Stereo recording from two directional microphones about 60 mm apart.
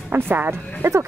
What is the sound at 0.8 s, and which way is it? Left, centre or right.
Speech, right.